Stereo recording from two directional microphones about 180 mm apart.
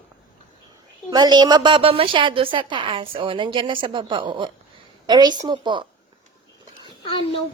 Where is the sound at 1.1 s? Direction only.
20° right (ahead or behind).